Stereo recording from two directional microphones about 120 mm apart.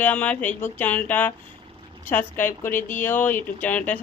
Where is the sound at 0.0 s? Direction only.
10° left (ahead or behind).